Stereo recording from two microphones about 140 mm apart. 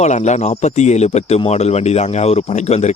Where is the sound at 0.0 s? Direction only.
55° left (ahead or behind).